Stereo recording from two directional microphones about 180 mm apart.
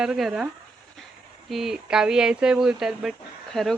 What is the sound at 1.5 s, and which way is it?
Speech, centre (ahead or behind).